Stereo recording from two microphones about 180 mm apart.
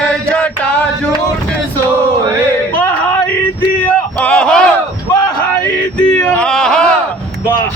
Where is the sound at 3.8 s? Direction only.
10° left (ahead or behind).